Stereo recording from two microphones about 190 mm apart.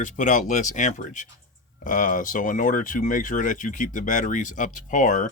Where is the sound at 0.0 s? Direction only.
40° left (ahead or behind).